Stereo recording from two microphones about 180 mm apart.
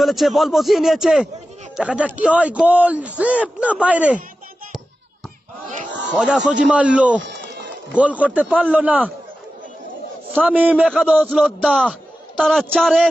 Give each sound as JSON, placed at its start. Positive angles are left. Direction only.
{"t": 0.0, "sound": "a man's voice", "side_deg": 0}
{"t": 6.1, "sound": "a man's voice", "side_deg": -5}
{"t": 7.2, "sound": "sheep", "side_deg": -75}
{"t": 7.9, "sound": "a man's voice", "side_deg": -10}
{"t": 10.3, "sound": "a man's voice", "side_deg": -10}